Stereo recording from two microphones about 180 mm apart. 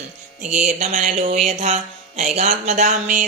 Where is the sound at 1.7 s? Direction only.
35° right (ahead or behind).